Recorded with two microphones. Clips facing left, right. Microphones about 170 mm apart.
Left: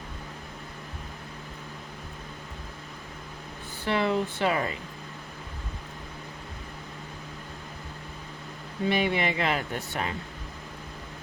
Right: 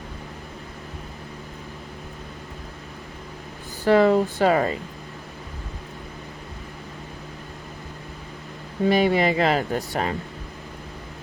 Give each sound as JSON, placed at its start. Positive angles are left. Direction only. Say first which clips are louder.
{"t": 3.8, "sound": "speech", "louder": "right 9 dB", "side_deg": -40}
{"t": 8.9, "sound": "speech", "louder": "right 7 dB", "side_deg": -40}